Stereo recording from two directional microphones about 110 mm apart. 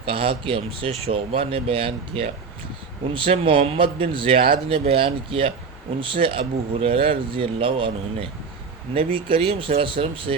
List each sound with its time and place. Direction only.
0.0 s speech: 55° right (ahead or behind)